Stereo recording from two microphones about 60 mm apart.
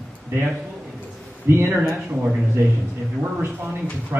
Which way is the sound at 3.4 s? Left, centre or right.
Right.